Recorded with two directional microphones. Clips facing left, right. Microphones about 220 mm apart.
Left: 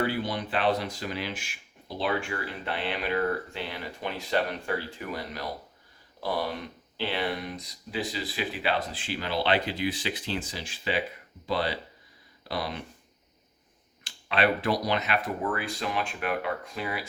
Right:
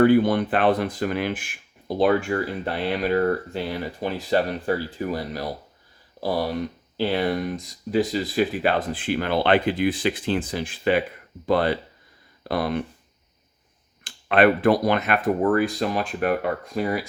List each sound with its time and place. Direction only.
0.0 s speech: 55° right (ahead or behind)
14.0 s speech: 55° right (ahead or behind)